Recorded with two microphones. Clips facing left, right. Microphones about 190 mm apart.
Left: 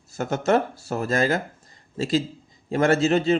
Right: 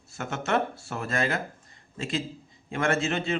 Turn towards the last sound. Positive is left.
turn(degrees=35)  # may be behind; listen again after turning